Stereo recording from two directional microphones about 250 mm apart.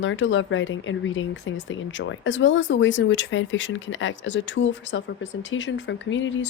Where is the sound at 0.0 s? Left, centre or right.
Left.